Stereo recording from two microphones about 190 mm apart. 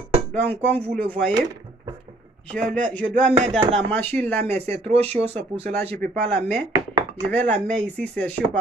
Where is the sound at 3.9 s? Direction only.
10° left (ahead or behind).